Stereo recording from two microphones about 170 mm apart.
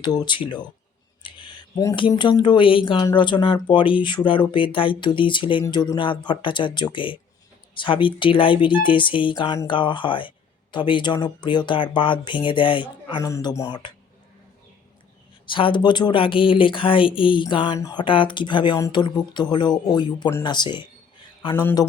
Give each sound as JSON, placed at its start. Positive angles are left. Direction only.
{"t": 0.0, "sound": "speech", "side_deg": 25}
{"t": 13.2, "sound": "speech", "side_deg": 20}
{"t": 15.4, "sound": "speech", "side_deg": 30}
{"t": 18.0, "sound": "a man's voice", "side_deg": 30}